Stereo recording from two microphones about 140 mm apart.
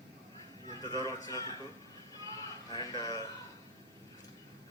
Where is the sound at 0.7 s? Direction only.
25° left (ahead or behind).